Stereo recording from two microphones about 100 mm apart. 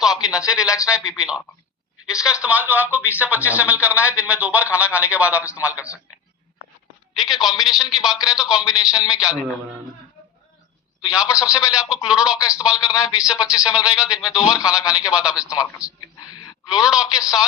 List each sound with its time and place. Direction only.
0.0 s speech: 5° right (ahead or behind)
7.2 s a man's voice: centre (ahead or behind)
11.0 s speech: 10° right (ahead or behind)
15.5 s a man's voice: 35° left (ahead or behind)
16.6 s speech: 5° right (ahead or behind)